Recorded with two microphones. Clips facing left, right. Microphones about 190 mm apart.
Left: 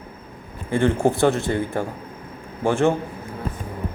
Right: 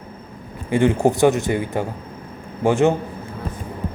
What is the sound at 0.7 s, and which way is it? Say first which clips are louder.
A man's voice: right 2 dB; 15° right (ahead or behind).